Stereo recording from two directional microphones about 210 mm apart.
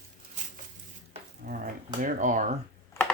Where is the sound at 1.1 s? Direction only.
40° right (ahead or behind).